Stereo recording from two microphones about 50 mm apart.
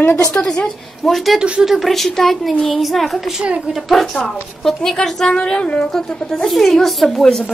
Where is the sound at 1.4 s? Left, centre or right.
Centre.